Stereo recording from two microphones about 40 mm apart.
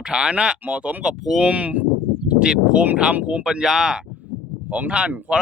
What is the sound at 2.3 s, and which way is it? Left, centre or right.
Speech, right.